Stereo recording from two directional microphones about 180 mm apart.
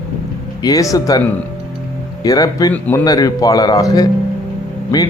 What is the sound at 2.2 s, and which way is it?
Speech, 20° left (ahead or behind).